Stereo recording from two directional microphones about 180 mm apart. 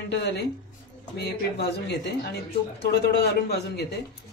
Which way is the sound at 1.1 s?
65° left (ahead or behind).